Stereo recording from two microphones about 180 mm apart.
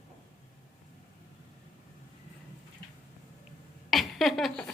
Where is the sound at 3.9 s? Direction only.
Centre (ahead or behind).